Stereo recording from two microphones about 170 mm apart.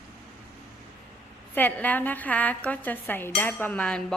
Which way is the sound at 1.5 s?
10° left (ahead or behind).